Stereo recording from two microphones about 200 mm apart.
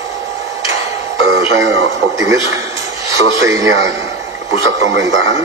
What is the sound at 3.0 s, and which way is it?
Speech, 15° right (ahead or behind).